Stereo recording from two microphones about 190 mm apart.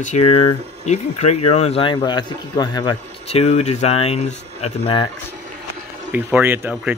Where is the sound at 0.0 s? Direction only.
35° left (ahead or behind).